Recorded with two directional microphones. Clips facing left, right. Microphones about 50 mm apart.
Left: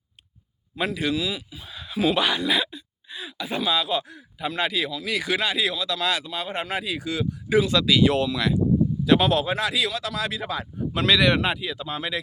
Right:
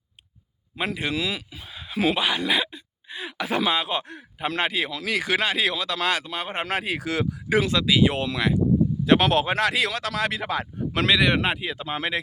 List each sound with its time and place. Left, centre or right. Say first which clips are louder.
0.7 s speech: left 1 dB; right
1.1 s speech: even; right
1.6 s a sound: even; right
3.2 s speech: right 4 dB; right
3.7 s speech: left 1 dB; right
4.9 s speech: right 1 dB; right
5.1 s speech: right 1 dB; right
6.7 s speech: right 2 dB; right
7.7 s speech: left 1 dB; right
8.2 s speech: left 1 dB; right
9.0 s speech: right 1 dB; right
11.0 s speech: left 1 dB; right
11.3 s speech: even; right